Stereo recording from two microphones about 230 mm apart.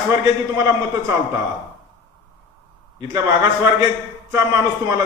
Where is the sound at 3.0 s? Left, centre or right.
Centre.